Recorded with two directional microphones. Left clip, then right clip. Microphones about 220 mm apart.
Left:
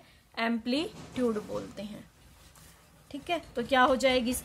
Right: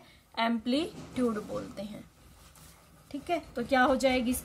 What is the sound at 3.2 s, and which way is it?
Speech, 20° left (ahead or behind).